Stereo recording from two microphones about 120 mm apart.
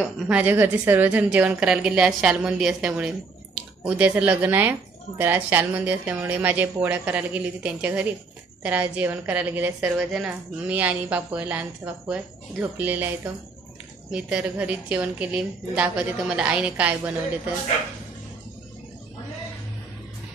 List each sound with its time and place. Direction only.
0.3 s a woman's voice: 15° right (ahead or behind)
4.2 s a woman's voice: 15° right (ahead or behind)